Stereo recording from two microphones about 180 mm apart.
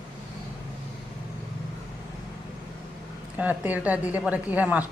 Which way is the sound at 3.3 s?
10° right (ahead or behind).